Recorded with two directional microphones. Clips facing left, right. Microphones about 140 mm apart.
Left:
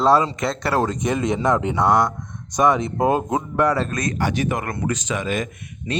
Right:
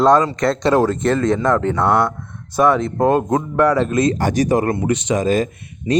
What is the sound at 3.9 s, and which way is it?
Speech, 25° right (ahead or behind).